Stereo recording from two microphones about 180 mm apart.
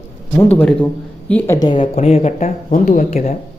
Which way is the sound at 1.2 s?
10° left (ahead or behind).